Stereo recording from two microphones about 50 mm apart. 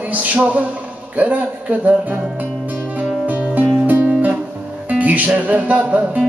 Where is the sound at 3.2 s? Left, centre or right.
Right.